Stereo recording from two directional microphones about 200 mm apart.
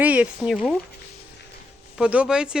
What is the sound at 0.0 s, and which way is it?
Speech, 5° right (ahead or behind).